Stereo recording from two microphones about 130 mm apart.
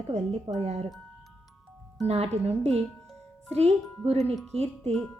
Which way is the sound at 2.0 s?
55° right (ahead or behind).